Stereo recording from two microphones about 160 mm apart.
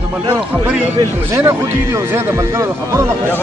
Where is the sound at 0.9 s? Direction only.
20° right (ahead or behind).